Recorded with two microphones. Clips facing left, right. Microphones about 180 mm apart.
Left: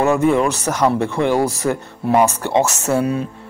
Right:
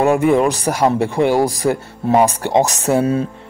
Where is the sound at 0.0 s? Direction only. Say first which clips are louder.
Right 2 dB; 15° right (ahead or behind).